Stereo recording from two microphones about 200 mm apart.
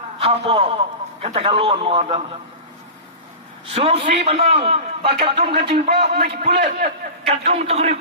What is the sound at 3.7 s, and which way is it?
A man's voice, 30° right (ahead or behind).